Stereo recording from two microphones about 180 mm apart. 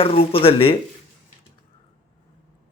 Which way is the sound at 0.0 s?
30° left (ahead or behind).